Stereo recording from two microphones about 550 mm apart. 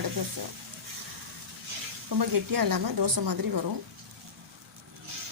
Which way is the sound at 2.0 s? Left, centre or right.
Right.